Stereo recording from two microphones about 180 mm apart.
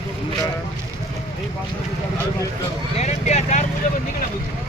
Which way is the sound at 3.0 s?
35° left (ahead or behind).